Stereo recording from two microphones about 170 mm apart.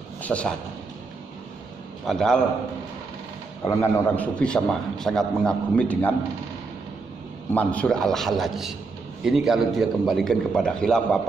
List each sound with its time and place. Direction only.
0.2 s a sound: 10° left (ahead or behind)
2.0 s a man's voice: 5° left (ahead or behind)
3.6 s a man's voice: 15° left (ahead or behind)
7.5 s a man's voice: 5° left (ahead or behind)